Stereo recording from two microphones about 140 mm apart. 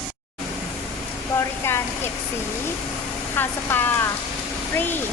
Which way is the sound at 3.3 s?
15° left (ahead or behind).